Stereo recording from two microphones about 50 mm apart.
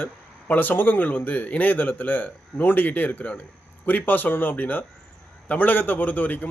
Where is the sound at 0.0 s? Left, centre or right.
Left.